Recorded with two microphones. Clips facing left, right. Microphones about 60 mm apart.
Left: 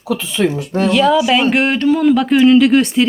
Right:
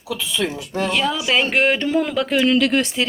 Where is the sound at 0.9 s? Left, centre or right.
Centre.